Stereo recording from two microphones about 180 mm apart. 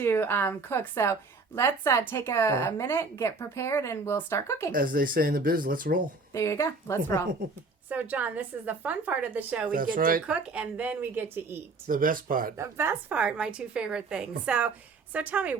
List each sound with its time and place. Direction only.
0.0 s speech: 10° left (ahead or behind)
4.7 s speech: 50° right (ahead or behind)
6.3 s speech: 15° left (ahead or behind)
7.9 s a woman's voice: 10° right (ahead or behind)
9.7 s speech: 50° right (ahead or behind)
10.2 s a woman's voice: 5° right (ahead or behind)
11.9 s speech: 50° right (ahead or behind)
12.5 s a woman's voice: 15° right (ahead or behind)